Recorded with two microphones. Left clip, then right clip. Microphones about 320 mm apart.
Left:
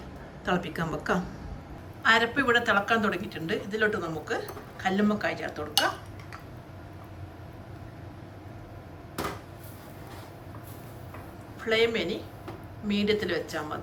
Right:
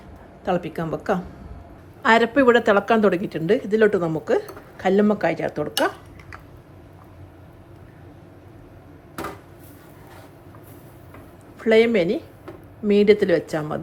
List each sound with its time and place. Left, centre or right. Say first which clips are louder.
0.4 s speech: right 5 dB; centre
11.6 s a woman's voice: right 9 dB; centre